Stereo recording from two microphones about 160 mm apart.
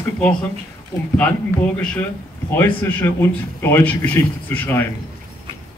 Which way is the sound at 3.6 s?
15° left (ahead or behind).